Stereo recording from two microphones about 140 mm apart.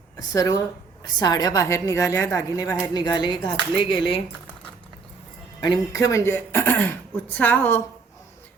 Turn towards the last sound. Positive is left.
turn(degrees=10)  # may be behind; listen again after turning